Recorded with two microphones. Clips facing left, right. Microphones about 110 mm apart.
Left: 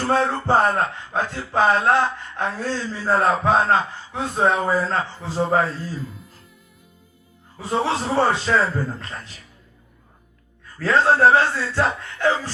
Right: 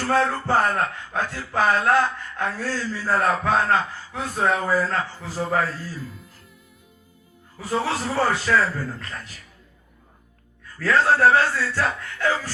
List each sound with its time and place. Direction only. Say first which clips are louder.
0.0 s speech: left 1 dB; 25° left (ahead or behind)
6.0 s speech: left 3 dB; centre (ahead or behind)
7.6 s speech: left 2 dB; 25° left (ahead or behind)
10.6 s speech: left 1 dB; 25° left (ahead or behind)